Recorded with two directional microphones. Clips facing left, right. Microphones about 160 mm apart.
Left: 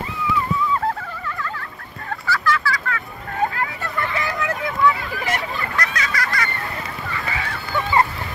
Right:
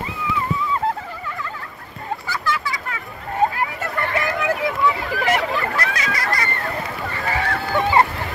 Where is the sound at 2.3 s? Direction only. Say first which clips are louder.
Left 5 dB; 20° right (ahead or behind).